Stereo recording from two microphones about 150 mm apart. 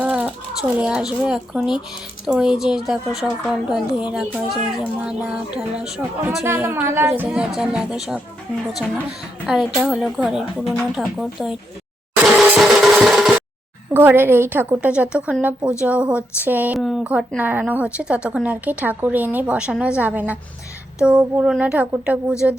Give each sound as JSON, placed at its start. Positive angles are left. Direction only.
{"t": 0.0, "sound": "a sound", "side_deg": -10}
{"t": 0.8, "sound": "a woman's voice", "side_deg": -5}
{"t": 6.4, "sound": "speech", "side_deg": -15}
{"t": 7.3, "sound": "a woman's voice", "side_deg": -5}
{"t": 9.5, "sound": "a woman's voice", "side_deg": 0}
{"t": 12.2, "sound": "music", "side_deg": 0}
{"t": 13.9, "sound": "speech", "side_deg": -15}